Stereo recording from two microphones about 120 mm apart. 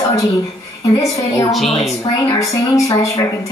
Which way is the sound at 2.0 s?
25° left (ahead or behind).